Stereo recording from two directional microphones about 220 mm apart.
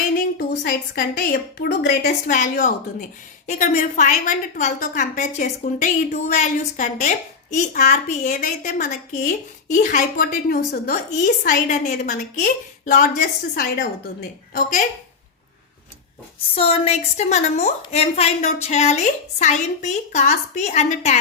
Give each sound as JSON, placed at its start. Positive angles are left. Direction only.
{"t": 0.3, "sound": "a woman's voice", "side_deg": 50}
{"t": 16.6, "sound": "a woman's voice", "side_deg": 25}